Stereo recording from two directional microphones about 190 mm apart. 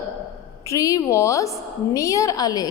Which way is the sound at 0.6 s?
15° left (ahead or behind).